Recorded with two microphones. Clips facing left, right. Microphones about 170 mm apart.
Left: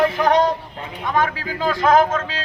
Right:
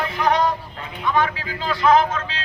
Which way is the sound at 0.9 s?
45° left (ahead or behind).